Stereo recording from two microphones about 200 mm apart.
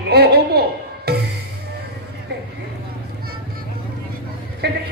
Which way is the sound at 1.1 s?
50° right (ahead or behind).